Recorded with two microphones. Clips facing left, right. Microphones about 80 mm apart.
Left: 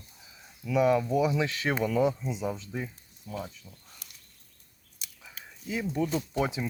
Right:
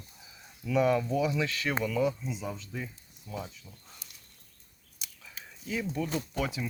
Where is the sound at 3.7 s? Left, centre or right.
Centre.